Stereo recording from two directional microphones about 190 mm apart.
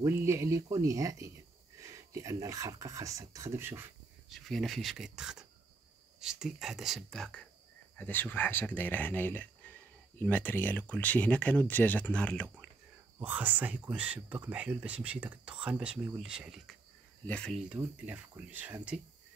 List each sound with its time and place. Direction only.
0.0 s speech: 15° right (ahead or behind)
4.3 s speech: centre (ahead or behind)
13.2 s speech: 10° right (ahead or behind)
17.6 s speech: 5° right (ahead or behind)